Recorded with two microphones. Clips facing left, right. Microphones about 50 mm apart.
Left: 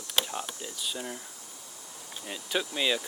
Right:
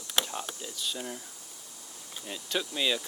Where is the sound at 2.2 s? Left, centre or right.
Centre.